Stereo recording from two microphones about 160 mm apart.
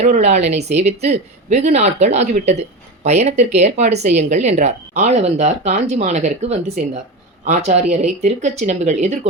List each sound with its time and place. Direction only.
0.0 s speech: 45° right (ahead or behind)